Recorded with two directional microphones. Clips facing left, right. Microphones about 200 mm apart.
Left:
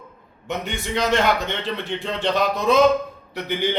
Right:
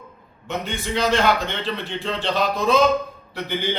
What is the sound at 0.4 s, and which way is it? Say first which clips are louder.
A man's voice: even; 20° left (ahead or behind).